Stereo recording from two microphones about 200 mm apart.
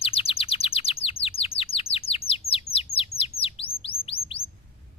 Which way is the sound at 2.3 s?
30° left (ahead or behind).